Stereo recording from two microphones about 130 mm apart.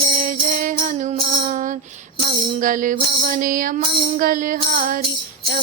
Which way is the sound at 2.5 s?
90° right.